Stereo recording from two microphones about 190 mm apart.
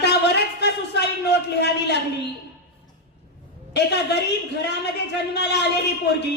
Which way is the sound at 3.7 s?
60° left (ahead or behind).